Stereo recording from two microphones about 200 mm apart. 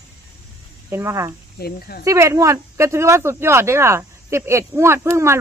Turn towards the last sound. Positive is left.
turn(degrees=-15)  # may be behind; listen again after turning